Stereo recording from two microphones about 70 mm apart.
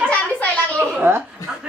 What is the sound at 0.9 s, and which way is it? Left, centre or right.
Chuckle, right.